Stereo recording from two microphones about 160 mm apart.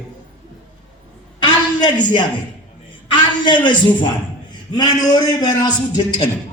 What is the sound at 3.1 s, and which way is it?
Speech, 30° left (ahead or behind).